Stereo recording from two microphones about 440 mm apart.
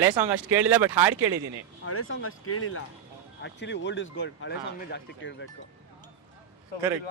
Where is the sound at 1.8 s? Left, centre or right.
Left.